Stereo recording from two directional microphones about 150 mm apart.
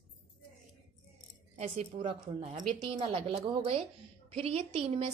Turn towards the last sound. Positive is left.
turn(degrees=-40)  # may be behind; listen again after turning